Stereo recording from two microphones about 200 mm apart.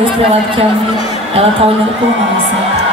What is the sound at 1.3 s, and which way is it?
Speech, 30° right (ahead or behind).